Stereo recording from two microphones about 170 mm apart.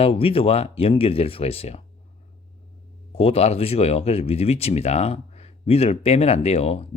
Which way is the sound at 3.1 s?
35° left (ahead or behind).